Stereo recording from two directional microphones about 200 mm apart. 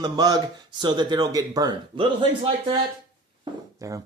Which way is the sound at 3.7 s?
15° right (ahead or behind).